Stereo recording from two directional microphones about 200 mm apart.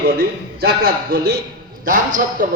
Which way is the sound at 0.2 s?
50° right (ahead or behind).